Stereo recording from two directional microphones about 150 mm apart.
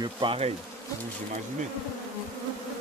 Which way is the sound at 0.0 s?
35° right (ahead or behind).